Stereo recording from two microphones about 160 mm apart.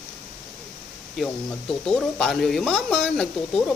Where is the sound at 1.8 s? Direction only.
5° left (ahead or behind).